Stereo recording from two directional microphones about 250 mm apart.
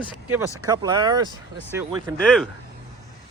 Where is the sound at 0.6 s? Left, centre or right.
Centre.